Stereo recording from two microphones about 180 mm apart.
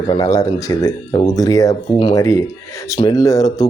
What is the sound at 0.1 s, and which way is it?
Speech, 20° left (ahead or behind).